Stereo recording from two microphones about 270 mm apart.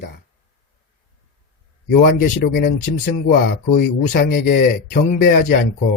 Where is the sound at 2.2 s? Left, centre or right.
Left.